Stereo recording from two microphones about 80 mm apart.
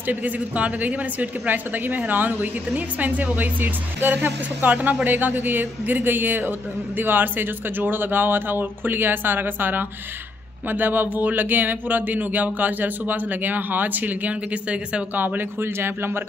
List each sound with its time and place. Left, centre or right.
0.0 s speech: right